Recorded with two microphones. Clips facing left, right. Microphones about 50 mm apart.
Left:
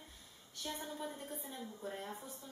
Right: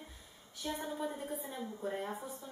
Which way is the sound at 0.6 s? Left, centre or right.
Centre.